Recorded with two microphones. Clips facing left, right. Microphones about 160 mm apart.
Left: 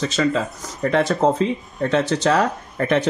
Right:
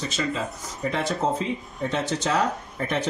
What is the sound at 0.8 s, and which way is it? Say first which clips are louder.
Speech: left 8 dB; 75° left (ahead or behind).